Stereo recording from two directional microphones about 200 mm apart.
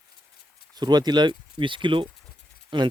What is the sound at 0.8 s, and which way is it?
Speech, 20° right (ahead or behind).